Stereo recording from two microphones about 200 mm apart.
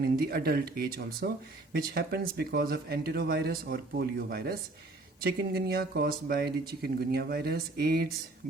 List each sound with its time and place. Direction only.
0.0 s speech: 55° right (ahead or behind)